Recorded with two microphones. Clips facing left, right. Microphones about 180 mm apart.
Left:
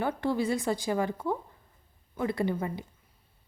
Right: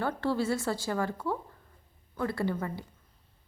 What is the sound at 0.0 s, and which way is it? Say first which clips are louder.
A woman's voice: left 1 dB; 15° left (ahead or behind).